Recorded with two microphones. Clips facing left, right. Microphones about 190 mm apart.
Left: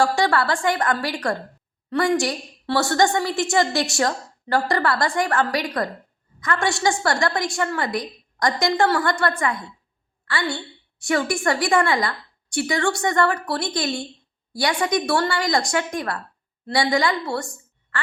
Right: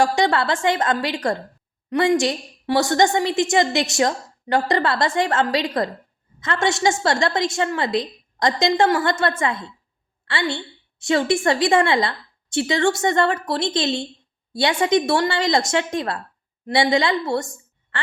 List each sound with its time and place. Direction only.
0.0 s a woman's voice: 20° right (ahead or behind)